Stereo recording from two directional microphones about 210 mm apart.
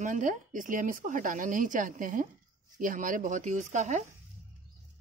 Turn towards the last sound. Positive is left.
turn(degrees=-35)  # may be behind; listen again after turning